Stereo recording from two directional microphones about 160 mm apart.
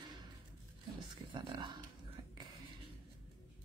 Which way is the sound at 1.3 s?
30° right (ahead or behind).